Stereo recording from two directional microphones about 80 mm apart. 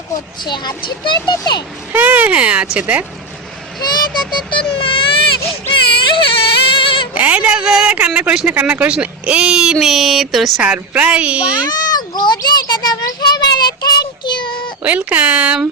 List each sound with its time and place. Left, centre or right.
0.4 s a child's voice: left
1.9 s speech: right
3.8 s speech: left
4.5 s a sound: left
7.1 s speech: centre
9.8 s a sound: centre
10.6 s speech: centre
11.6 s a child's voice: left
13.1 s child singing: left
14.8 s speech: right